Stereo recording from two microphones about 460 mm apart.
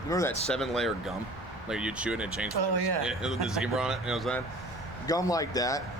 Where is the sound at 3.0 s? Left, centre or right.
Centre.